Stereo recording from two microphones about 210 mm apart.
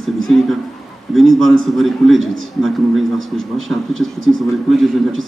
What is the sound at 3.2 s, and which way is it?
Speech, 70° right (ahead or behind).